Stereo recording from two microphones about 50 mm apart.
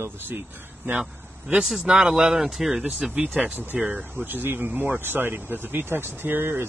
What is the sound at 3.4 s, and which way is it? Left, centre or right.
Speech, right.